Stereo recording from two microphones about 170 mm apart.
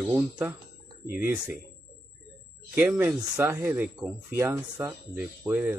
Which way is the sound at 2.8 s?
5° right (ahead or behind).